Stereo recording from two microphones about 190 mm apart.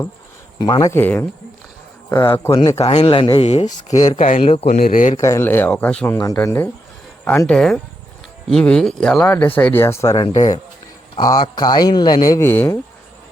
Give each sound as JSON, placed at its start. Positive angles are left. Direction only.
{"t": 0.6, "sound": "speech", "side_deg": 20}
{"t": 2.3, "sound": "speech", "side_deg": 15}
{"t": 2.7, "sound": "speech", "side_deg": 30}
{"t": 3.9, "sound": "speech", "side_deg": 20}
{"t": 4.2, "sound": "speech", "side_deg": 35}
{"t": 4.6, "sound": "speech", "side_deg": 45}
{"t": 5.1, "sound": "speech", "side_deg": 15}